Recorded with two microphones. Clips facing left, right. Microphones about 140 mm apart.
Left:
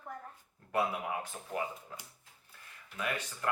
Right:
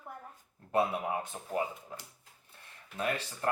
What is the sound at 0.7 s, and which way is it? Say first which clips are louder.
Speech: right 3 dB; 30° right (ahead or behind).